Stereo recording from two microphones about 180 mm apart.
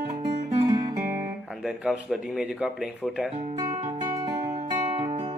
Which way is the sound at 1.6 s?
5° right (ahead or behind).